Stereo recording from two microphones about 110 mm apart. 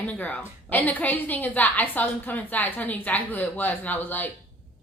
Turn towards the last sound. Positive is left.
turn(degrees=15)  # may be behind; listen again after turning